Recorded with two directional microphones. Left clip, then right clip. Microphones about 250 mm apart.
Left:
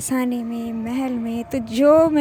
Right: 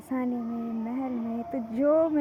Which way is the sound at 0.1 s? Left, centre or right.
Left.